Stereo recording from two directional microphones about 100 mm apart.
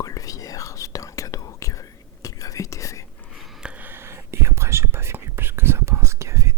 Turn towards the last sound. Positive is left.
turn(degrees=-30)  # may be behind; listen again after turning